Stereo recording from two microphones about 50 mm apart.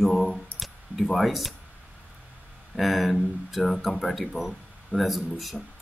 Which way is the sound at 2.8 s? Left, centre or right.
Centre.